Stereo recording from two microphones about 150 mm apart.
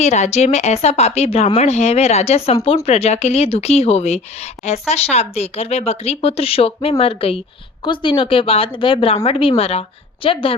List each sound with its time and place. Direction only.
0.0 s a woman's voice: 50° left (ahead or behind)